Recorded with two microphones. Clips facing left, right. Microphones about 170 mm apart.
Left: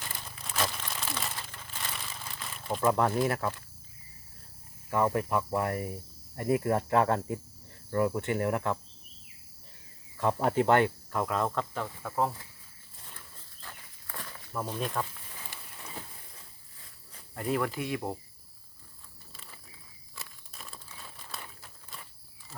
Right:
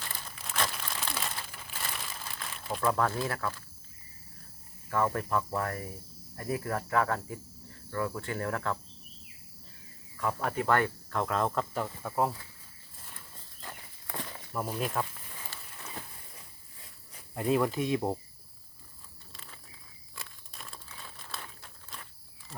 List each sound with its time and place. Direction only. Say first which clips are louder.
0.3 s crumpling: left 1 dB; 5° left (ahead or behind)
2.8 s cricket: left 3 dB; 20° left (ahead or behind)
4.9 s speech: left 2 dB; 15° left (ahead or behind)
6.3 s cricket: left 6 dB; 25° left (ahead or behind)
10.2 s cricket: left 5 dB; 25° left (ahead or behind)
11.1 s speech: even; 5° left (ahead or behind)
13.6 s a sound: right 3 dB; 15° right (ahead or behind)
15.5 s a sound: even; 15° left (ahead or behind)
17.2 s speech: right 3 dB; 20° right (ahead or behind)
19.3 s a sound: even; 5° left (ahead or behind)
20.1 s crumpling: even; centre (ahead or behind)